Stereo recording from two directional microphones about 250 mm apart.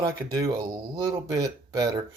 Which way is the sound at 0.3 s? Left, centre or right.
Centre.